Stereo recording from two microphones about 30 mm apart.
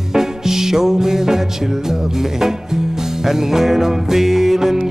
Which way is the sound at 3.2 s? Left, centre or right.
Centre.